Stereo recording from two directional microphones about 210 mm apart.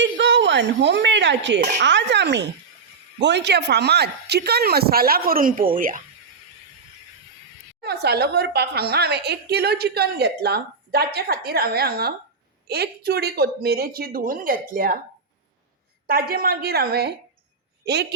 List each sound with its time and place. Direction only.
0.0 s a woman's voice: 60° right (ahead or behind); by 6.0 s 40° right (ahead or behind)
7.8 s a woman's voice: 50° right (ahead or behind)
16.0 s a woman's voice: 45° right (ahead or behind)